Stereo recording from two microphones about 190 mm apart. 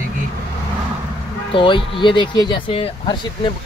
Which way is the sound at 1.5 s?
25° left (ahead or behind).